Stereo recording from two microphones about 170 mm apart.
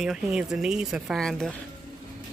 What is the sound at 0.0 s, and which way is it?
Speech, 5° right (ahead or behind).